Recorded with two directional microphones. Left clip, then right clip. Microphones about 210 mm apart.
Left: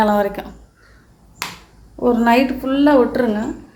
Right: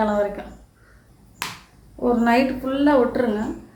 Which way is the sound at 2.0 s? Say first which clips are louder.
Left 4 dB; 45° left (ahead or behind).